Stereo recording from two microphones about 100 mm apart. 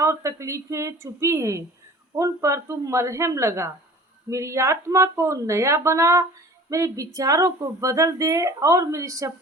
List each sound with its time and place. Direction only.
0.0 s a woman's voice: 30° right (ahead or behind)